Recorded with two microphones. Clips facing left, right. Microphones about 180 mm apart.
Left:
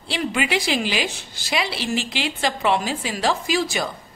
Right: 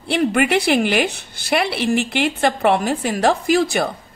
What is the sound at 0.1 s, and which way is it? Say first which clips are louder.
A woman's voice: right 6 dB; 55° right (ahead or behind).